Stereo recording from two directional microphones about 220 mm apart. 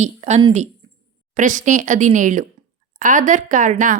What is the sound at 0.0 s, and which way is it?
A woman's voice, 30° right (ahead or behind).